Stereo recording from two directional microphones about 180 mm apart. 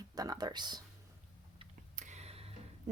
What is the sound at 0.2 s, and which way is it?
Speech, 20° right (ahead or behind).